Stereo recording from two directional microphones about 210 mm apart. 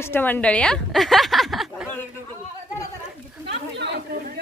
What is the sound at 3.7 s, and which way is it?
Chatter, 55° right (ahead or behind).